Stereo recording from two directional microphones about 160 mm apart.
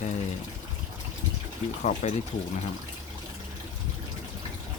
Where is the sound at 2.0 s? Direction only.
45° left (ahead or behind).